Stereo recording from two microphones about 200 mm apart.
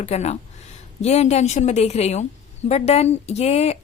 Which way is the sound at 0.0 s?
35° left (ahead or behind).